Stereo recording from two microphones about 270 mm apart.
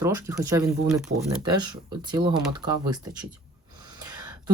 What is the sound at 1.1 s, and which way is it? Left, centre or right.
Speech, right.